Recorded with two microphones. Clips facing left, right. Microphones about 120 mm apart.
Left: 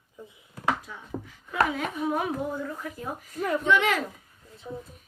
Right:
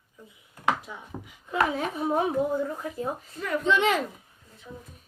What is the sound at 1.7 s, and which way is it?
Speech, 30° right (ahead or behind).